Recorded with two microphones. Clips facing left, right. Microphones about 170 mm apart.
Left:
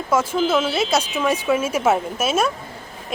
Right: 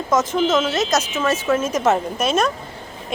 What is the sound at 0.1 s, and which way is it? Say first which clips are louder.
Speech: right 1 dB; 10° left (ahead or behind).